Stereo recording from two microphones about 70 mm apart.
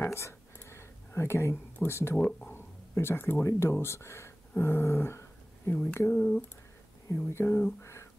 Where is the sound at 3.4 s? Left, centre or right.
Left.